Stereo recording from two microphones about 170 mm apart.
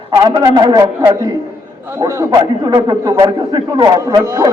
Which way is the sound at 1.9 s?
15° right (ahead or behind).